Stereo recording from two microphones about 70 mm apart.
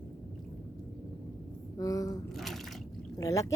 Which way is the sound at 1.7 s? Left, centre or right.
Left.